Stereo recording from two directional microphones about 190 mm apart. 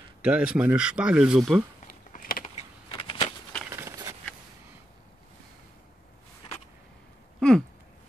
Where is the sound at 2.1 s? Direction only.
45° left (ahead or behind).